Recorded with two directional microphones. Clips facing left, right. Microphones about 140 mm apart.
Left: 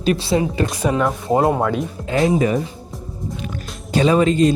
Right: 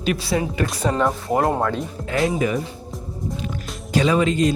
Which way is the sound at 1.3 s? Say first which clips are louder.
Left 6 dB; 20° left (ahead or behind).